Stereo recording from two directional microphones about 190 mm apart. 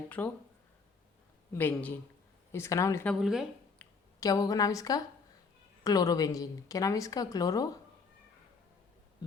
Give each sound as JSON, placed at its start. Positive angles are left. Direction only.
{"t": 0.1, "sound": "speech", "side_deg": 5}
{"t": 1.5, "sound": "speech", "side_deg": 10}
{"t": 3.1, "sound": "speech", "side_deg": -5}
{"t": 3.8, "sound": "a woman's voice", "side_deg": 20}